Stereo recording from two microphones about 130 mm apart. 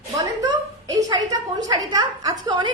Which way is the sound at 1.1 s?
30° right (ahead or behind).